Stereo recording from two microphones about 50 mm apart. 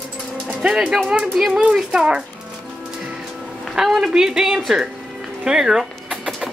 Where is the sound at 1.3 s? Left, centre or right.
Centre.